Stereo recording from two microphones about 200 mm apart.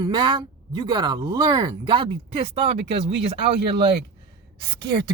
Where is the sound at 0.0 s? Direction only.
20° right (ahead or behind).